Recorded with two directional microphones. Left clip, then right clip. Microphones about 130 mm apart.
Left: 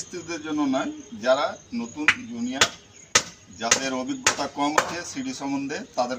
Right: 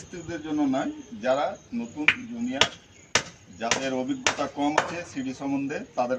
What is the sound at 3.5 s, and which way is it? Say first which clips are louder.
A man's voice: left 3 dB; 25° right (ahead or behind).